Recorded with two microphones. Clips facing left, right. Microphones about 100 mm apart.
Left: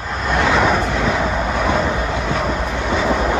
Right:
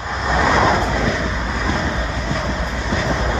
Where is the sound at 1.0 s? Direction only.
50° left (ahead or behind).